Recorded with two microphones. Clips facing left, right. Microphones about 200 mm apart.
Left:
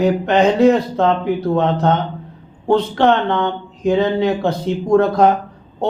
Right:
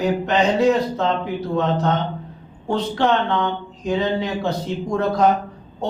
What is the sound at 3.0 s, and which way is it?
Speech, 55° left (ahead or behind).